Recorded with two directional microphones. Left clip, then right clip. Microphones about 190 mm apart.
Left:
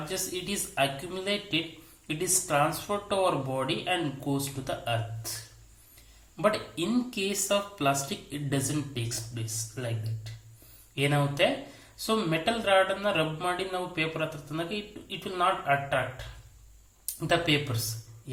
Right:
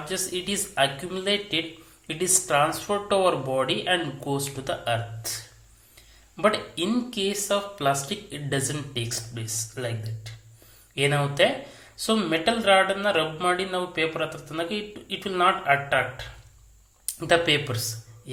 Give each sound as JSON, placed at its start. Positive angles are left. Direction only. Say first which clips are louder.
{"t": 0.1, "sound": "speech", "louder": "right 6 dB", "side_deg": -10}
{"t": 6.3, "sound": "speech", "louder": "right 4 dB", "side_deg": -5}
{"t": 10.9, "sound": "speech", "louder": "right 4 dB", "side_deg": -10}